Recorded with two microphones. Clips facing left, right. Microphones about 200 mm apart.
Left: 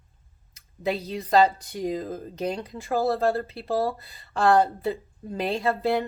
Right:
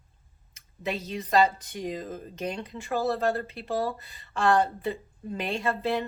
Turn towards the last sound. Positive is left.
turn(degrees=35)  # may be behind; listen again after turning